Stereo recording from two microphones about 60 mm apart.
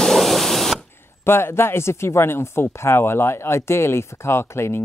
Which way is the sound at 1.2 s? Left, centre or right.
Left.